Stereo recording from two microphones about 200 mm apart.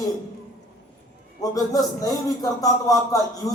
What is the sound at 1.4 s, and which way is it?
A man's voice, 15° left (ahead or behind).